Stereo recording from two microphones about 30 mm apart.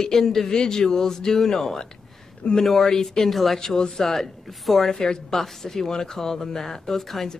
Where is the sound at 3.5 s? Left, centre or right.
Left.